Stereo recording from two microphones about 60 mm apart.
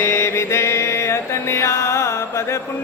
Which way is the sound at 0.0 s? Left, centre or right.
Left.